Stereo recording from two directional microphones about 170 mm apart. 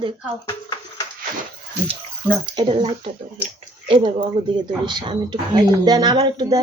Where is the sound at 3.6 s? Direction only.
30° right (ahead or behind).